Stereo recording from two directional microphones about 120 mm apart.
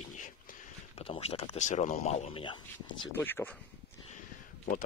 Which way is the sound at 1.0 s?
55° left (ahead or behind).